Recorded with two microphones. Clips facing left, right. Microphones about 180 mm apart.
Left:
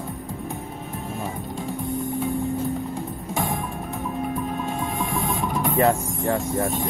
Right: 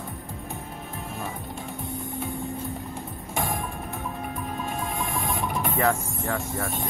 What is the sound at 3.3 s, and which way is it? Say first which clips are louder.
Music: left 2 dB; 20° left (ahead or behind).